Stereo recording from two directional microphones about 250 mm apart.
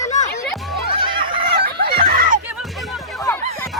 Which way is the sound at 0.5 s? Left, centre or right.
Centre.